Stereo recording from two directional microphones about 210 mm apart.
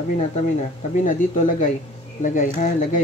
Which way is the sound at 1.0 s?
40° left (ahead or behind).